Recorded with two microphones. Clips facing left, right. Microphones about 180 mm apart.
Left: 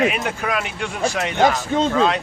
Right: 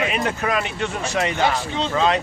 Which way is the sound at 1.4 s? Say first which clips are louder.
Left 4 dB; 45° left (ahead or behind).